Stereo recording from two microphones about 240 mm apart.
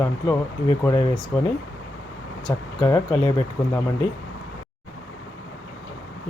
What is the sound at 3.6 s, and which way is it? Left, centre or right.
Speech, centre.